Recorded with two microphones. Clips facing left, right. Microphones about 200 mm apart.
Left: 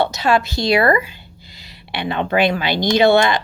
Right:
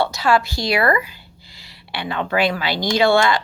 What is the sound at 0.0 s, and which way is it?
A woman's voice, 20° left (ahead or behind).